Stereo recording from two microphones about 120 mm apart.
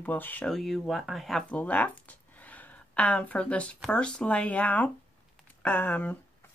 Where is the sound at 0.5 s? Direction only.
Centre (ahead or behind).